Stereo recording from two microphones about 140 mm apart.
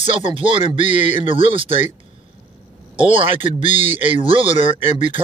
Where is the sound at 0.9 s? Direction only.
60° left (ahead or behind).